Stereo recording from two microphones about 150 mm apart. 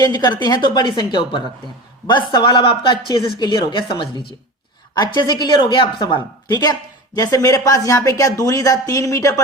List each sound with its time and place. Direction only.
0.0 s a woman's voice: 25° left (ahead or behind)